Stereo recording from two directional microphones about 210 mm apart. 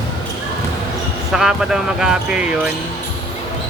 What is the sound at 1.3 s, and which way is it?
Speech, centre (ahead or behind).